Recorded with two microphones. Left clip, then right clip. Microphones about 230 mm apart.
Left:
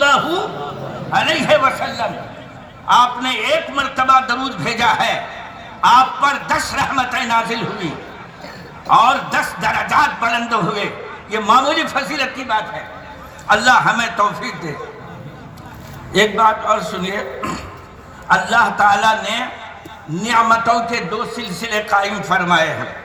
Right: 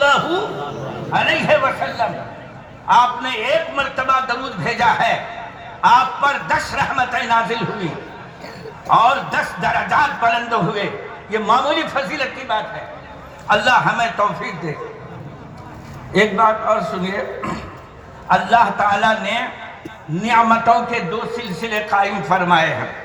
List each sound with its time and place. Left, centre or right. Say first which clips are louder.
0.0 s a sound: left 1 dB; left
1.1 s a man's voice: left 1 dB; left
8.9 s a man's voice: left 2 dB; left
16.1 s a man's voice: left 1 dB; left